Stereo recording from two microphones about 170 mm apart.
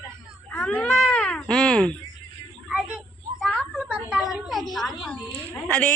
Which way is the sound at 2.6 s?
5° right (ahead or behind).